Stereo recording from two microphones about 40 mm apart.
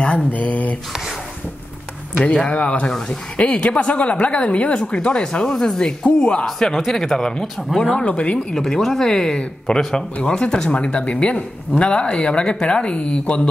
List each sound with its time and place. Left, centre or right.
0.3 s speech: left
2.4 s speech: left
4.7 s speech: left
6.4 s speech: centre
7.5 s speech: centre
7.9 s speech: left
8.5 s speech: centre
10.2 s speech: left